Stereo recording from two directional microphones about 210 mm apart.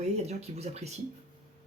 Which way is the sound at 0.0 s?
30° right (ahead or behind).